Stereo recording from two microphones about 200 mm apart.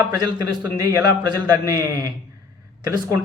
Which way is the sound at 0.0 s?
20° right (ahead or behind).